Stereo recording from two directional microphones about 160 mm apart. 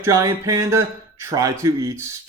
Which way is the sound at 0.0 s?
20° right (ahead or behind).